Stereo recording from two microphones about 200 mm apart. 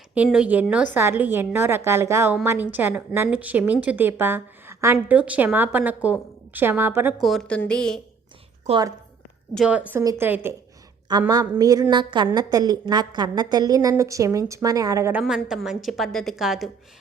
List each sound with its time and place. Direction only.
0.1 s a woman's voice: 5° right (ahead or behind)
8.7 s a woman's voice: 30° right (ahead or behind)
9.6 s a woman's voice: 5° right (ahead or behind)
15.2 s a woman's voice: centre (ahead or behind)